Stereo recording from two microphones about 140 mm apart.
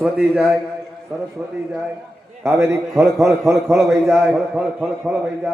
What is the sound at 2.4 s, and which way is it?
Speech, 20° right (ahead or behind).